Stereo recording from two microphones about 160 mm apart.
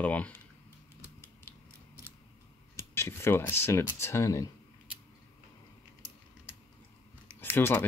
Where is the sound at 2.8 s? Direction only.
15° left (ahead or behind).